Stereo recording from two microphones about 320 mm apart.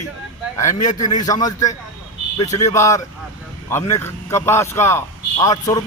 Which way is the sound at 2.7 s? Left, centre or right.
Centre.